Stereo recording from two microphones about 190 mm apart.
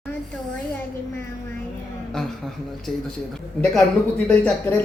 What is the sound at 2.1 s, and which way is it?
Speech, centre (ahead or behind).